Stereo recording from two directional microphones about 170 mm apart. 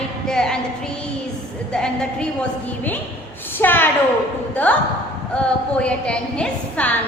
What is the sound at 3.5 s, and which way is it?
A woman's voice, 10° left (ahead or behind).